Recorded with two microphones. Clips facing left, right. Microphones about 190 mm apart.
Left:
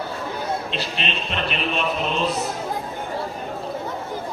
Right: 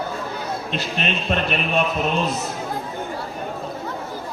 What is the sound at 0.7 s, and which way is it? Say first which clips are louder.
A man's voice: right 3 dB; 50° right (ahead or behind).